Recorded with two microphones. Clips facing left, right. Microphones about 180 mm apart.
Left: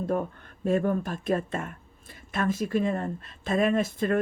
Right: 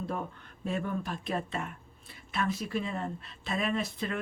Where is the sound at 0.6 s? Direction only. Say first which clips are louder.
Left 8 dB; 45° left (ahead or behind).